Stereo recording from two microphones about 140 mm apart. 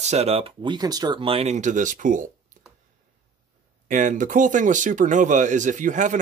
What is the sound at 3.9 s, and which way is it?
Speech, 65° right (ahead or behind).